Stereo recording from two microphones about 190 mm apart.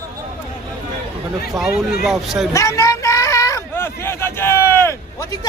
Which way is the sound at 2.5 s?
15° left (ahead or behind).